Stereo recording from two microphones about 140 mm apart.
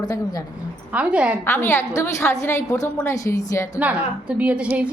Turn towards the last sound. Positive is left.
turn(degrees=-10)  # may be behind; listen again after turning